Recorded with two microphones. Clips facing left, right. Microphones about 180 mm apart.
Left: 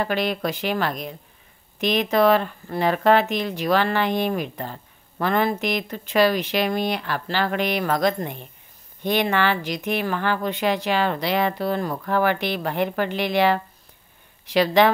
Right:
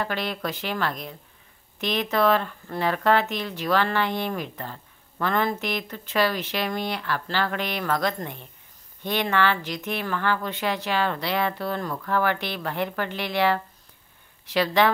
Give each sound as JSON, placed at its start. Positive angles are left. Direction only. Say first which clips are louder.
{"t": 0.0, "sound": "speech", "louder": "left 5 dB", "side_deg": 15}